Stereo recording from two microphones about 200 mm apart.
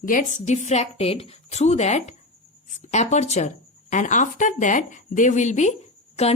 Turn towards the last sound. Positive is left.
turn(degrees=35)  # may be behind; listen again after turning